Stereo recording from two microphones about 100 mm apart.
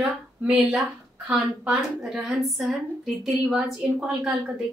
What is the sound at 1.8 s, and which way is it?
A woman's voice, centre (ahead or behind).